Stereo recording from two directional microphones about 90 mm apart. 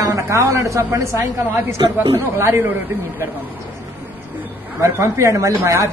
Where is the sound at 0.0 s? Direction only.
35° right (ahead or behind).